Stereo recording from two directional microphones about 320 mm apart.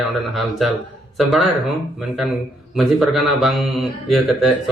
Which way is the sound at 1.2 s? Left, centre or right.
Centre.